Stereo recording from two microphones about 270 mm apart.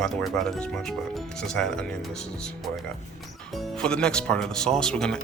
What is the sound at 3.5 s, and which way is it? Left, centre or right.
Speech, centre.